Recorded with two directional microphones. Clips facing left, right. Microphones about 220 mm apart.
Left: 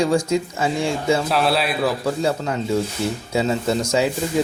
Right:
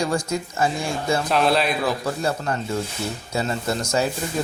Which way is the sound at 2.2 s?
90° left.